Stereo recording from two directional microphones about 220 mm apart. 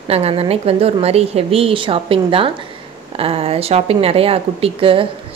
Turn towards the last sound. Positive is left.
turn(degrees=-25)  # may be behind; listen again after turning